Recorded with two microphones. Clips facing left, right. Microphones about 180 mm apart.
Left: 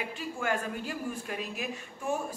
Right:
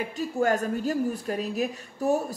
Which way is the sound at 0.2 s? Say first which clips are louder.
Right 8 dB; 40° right (ahead or behind).